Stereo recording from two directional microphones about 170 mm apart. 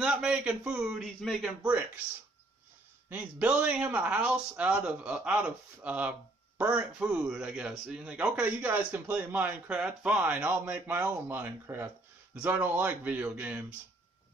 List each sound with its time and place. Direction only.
0.0 s speech: 5° right (ahead or behind)
3.1 s speech: 10° right (ahead or behind)